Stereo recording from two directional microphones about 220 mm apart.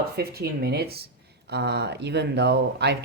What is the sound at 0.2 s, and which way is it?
Speech, 45° right (ahead or behind).